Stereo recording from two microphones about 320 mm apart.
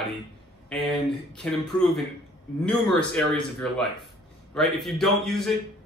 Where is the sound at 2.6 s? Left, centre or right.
Centre.